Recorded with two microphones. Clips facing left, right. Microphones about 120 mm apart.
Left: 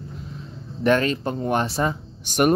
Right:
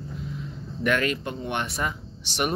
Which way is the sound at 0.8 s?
30° left (ahead or behind).